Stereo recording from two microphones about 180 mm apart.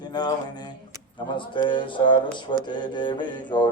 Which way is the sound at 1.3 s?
25° left (ahead or behind).